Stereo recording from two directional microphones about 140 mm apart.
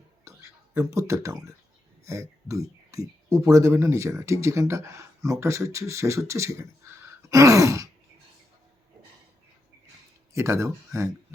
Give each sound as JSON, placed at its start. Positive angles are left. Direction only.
{"t": 0.3, "sound": "speech", "side_deg": -20}
{"t": 10.3, "sound": "speech", "side_deg": -20}